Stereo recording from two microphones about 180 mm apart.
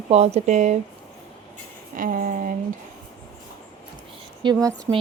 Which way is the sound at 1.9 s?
45° right (ahead or behind).